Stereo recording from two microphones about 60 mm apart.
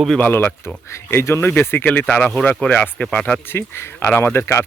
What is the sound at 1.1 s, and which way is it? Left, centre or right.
Speech, left.